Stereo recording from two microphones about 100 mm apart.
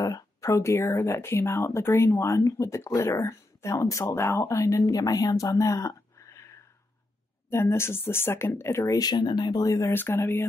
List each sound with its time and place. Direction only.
0.0 s speech: 35° left (ahead or behind)
9.8 s speech: 25° left (ahead or behind)